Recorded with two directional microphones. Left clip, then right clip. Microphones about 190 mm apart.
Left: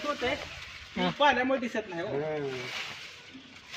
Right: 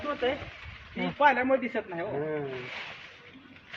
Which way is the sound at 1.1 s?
45° left (ahead or behind).